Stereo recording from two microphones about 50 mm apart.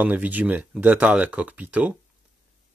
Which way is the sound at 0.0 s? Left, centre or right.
Right.